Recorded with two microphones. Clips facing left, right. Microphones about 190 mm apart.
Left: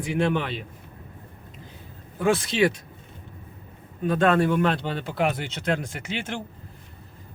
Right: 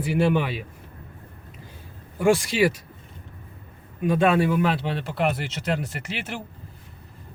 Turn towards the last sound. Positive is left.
turn(degrees=-5)  # may be behind; listen again after turning